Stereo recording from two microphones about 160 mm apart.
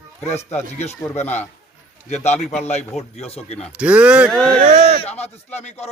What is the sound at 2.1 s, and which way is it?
A man's voice, 45° left (ahead or behind).